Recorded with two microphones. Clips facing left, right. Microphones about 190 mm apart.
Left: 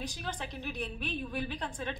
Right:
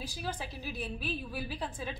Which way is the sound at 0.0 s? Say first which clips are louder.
Even; 5° right (ahead or behind).